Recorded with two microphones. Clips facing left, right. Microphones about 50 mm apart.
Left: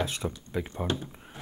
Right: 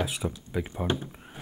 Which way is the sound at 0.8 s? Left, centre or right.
Right.